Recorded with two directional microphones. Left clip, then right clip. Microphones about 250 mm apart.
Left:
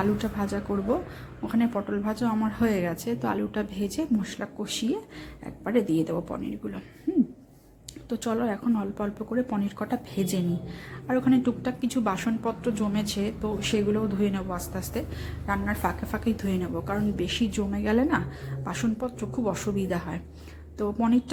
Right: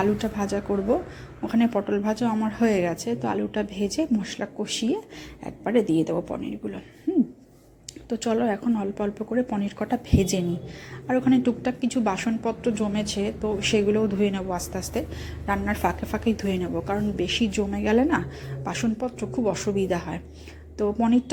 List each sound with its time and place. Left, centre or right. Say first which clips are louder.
0.0 s a woman's voice: right 3 dB; centre
8.1 s a woman's voice: right 4 dB; centre